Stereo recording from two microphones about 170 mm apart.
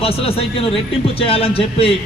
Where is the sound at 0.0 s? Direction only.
35° left (ahead or behind).